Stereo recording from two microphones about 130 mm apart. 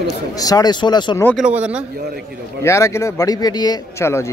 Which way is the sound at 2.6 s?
20° left (ahead or behind).